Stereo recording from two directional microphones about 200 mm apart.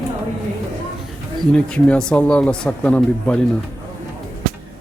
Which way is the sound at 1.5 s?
5° left (ahead or behind).